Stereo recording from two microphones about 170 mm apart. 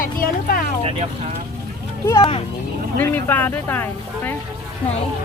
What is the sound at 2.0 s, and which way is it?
Speech, 20° left (ahead or behind).